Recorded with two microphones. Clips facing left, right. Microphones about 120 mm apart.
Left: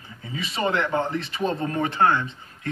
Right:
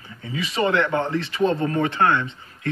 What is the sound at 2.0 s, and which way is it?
Speech, 30° left (ahead or behind).